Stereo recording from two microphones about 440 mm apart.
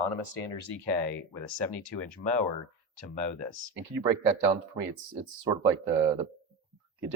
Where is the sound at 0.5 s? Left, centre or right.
Right.